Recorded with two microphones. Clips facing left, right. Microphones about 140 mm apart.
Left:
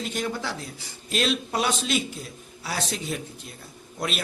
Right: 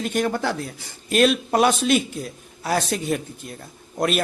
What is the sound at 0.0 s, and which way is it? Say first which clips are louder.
A man's voice: right 7 dB; 55° right (ahead or behind).